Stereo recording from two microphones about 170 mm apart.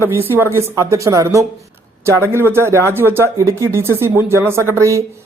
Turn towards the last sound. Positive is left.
turn(degrees=-15)  # may be behind; listen again after turning